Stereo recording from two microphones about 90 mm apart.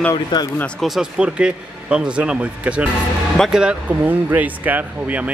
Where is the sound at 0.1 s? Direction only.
50° left (ahead or behind).